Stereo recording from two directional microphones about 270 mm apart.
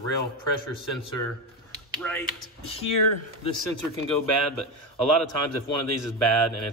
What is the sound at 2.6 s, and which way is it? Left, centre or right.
Speech, left.